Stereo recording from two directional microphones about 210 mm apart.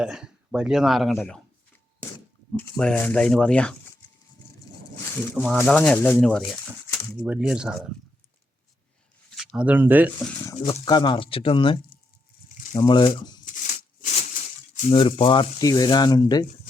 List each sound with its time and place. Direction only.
0.0 s speech: 5° right (ahead or behind)
2.6 s speech: 5° left (ahead or behind)
5.3 s speech: 5° left (ahead or behind)
7.2 s speech: 5° right (ahead or behind)
9.3 s speech: centre (ahead or behind)
10.7 s speech: 25° left (ahead or behind)
13.4 s shuffling cards: 35° left (ahead or behind)
14.8 s speech: 30° left (ahead or behind)